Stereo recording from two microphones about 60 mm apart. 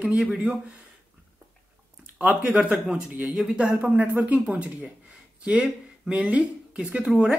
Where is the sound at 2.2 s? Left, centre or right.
Right.